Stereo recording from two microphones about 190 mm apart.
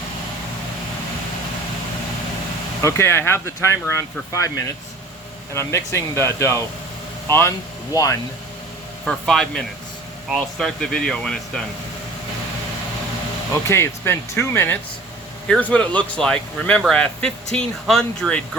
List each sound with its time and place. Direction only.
2.8 s speech: 15° left (ahead or behind)
9.0 s speech: centre (ahead or behind)
13.5 s speech: 15° left (ahead or behind)